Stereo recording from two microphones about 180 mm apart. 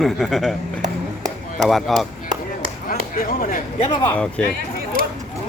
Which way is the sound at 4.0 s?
10° left (ahead or behind).